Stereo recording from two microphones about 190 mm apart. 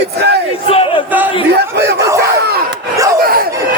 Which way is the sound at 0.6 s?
30° left (ahead or behind).